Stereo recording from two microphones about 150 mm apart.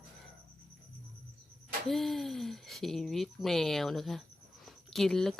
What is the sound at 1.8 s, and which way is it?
Speech, centre (ahead or behind).